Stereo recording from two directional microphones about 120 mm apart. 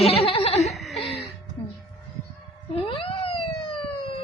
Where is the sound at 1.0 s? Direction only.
55° left (ahead or behind).